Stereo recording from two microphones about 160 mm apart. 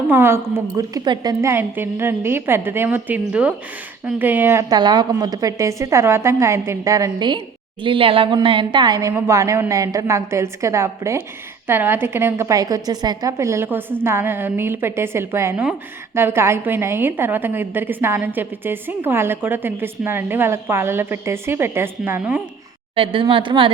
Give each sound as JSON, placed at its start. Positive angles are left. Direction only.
{"t": 0.1, "sound": "a woman's voice", "side_deg": -15}
{"t": 4.7, "sound": "a woman's voice", "side_deg": -25}
{"t": 23.0, "sound": "a woman's voice", "side_deg": -35}